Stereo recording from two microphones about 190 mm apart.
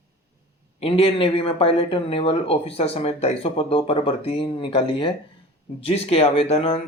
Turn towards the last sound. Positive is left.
turn(degrees=30)  # may be behind; listen again after turning